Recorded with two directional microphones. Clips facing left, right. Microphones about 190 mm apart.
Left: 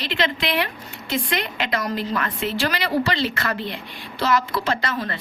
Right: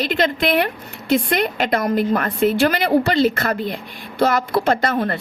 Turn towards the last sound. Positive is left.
turn(degrees=-50)  # may be behind; listen again after turning